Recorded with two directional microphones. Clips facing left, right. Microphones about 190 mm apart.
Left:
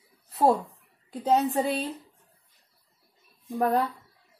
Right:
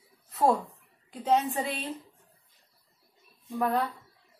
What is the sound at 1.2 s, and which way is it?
Speech, 40° left (ahead or behind).